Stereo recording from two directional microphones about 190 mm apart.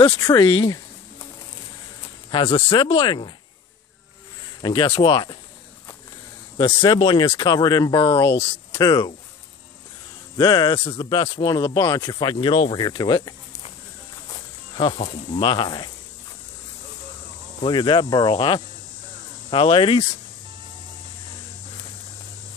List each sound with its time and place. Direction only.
0.0 s speech: 20° left (ahead or behind)
2.3 s speech: 30° left (ahead or behind)
4.6 s speech: 25° left (ahead or behind)
6.6 s speech: 30° left (ahead or behind)
10.3 s speech: 20° left (ahead or behind)
14.3 s cricket: 25° left (ahead or behind)
15.3 s speech: 25° left (ahead or behind)
17.6 s speech: 25° left (ahead or behind)